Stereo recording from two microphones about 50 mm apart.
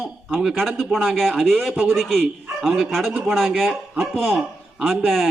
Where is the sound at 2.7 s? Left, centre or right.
Centre.